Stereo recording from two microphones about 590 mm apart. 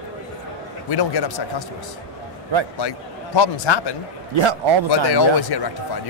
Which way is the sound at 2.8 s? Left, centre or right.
Left.